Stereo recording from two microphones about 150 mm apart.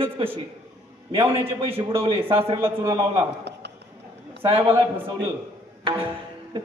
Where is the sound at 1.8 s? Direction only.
35° right (ahead or behind).